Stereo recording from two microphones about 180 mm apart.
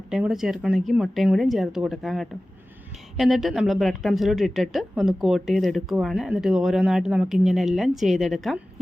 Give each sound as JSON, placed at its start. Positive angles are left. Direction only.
{"t": 0.1, "sound": "a woman's voice", "side_deg": -5}